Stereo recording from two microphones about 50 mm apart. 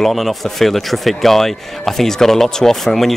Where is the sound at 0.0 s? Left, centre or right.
Centre.